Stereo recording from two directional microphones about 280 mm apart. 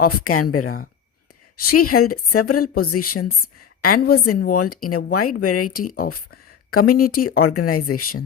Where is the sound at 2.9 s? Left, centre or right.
Left.